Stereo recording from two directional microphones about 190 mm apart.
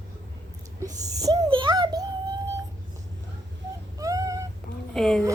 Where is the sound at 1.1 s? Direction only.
20° right (ahead or behind).